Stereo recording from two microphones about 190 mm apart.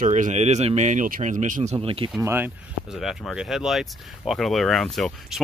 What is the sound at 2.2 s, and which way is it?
Speech, 10° right (ahead or behind).